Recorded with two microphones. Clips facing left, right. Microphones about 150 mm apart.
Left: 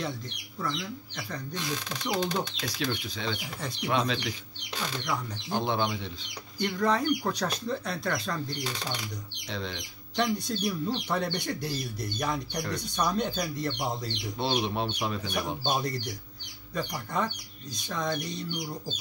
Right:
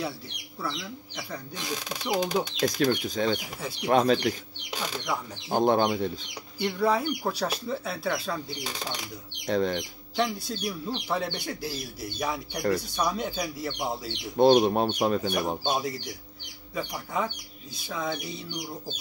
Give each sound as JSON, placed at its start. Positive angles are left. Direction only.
{"t": 0.6, "sound": "speech", "side_deg": -10}
{"t": 2.6, "sound": "speech", "side_deg": -45}
{"t": 4.6, "sound": "speech", "side_deg": -10}
{"t": 5.5, "sound": "speech", "side_deg": -45}
{"t": 6.6, "sound": "speech", "side_deg": -10}
{"t": 9.5, "sound": "speech", "side_deg": -45}
{"t": 10.1, "sound": "speech", "side_deg": -5}
{"t": 14.3, "sound": "speech", "side_deg": -45}
{"t": 15.6, "sound": "speech", "side_deg": -5}